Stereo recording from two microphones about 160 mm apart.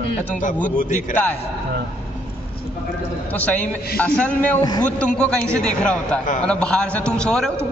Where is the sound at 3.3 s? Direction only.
10° left (ahead or behind).